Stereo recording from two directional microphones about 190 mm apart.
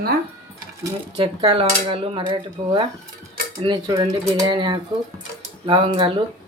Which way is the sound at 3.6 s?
25° right (ahead or behind).